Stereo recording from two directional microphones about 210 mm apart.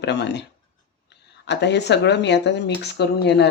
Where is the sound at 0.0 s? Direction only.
55° left (ahead or behind).